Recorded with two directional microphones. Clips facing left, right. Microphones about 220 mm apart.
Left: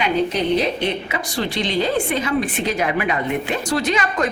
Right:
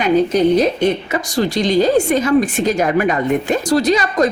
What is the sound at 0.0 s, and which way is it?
A woman's voice, 45° right (ahead or behind).